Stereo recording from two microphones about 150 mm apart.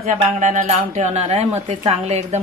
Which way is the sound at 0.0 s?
55° right (ahead or behind).